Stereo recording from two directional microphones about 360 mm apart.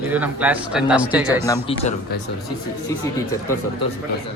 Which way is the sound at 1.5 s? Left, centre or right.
Centre.